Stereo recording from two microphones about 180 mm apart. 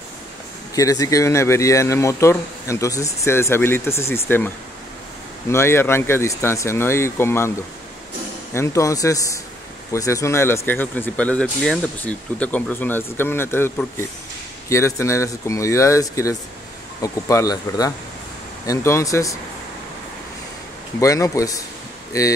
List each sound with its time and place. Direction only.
0.7 s speech: 20° left (ahead or behind)
5.5 s speech: 15° left (ahead or behind)
8.5 s speech: 15° left (ahead or behind)
21.0 s speech: 20° left (ahead or behind)